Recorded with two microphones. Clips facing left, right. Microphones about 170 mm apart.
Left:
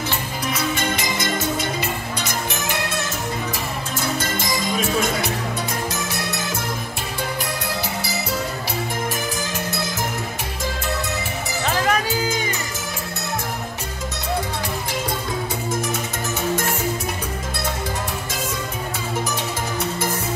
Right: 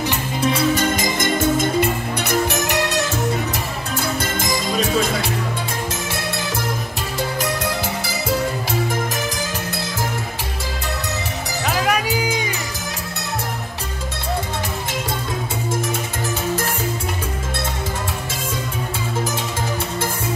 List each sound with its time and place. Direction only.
0.1 s music: 30° right (ahead or behind)
0.9 s music: 50° right (ahead or behind); by 3.0 s 75° right (ahead or behind)
11.6 s music: 10° right (ahead or behind)